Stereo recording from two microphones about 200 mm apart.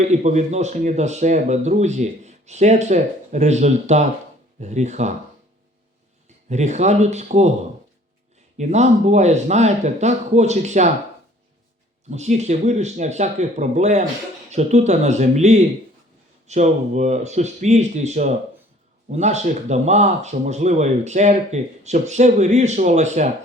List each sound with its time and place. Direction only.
0.0 s speech: 35° right (ahead or behind)
6.2 s a man's voice: 35° right (ahead or behind)
8.5 s speech: 35° right (ahead or behind)
12.1 s speech: 35° right (ahead or behind)